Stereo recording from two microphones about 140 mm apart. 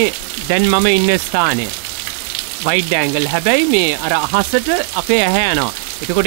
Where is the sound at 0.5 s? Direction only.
15° right (ahead or behind).